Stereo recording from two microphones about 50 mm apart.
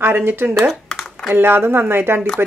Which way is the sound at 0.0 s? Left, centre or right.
Right.